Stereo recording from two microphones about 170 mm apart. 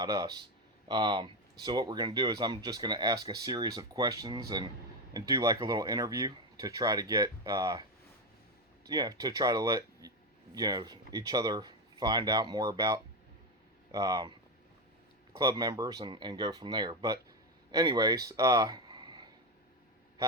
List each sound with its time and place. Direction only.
0.0 s speech: 20° right (ahead or behind)
8.9 s speech: 20° right (ahead or behind)
15.4 s speech: 20° right (ahead or behind)